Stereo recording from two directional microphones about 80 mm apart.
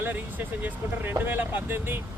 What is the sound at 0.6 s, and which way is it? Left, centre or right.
Speech, right.